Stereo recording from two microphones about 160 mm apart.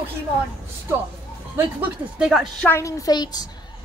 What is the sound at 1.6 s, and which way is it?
Speech, 10° right (ahead or behind).